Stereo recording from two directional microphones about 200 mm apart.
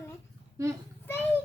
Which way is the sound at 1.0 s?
10° left (ahead or behind).